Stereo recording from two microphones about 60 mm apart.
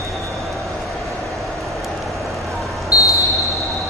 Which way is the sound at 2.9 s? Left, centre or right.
Left.